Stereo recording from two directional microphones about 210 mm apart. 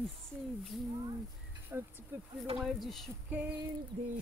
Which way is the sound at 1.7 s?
10° right (ahead or behind).